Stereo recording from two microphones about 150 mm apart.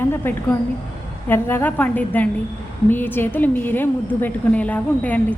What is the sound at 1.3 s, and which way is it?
A woman's voice, 15° left (ahead or behind).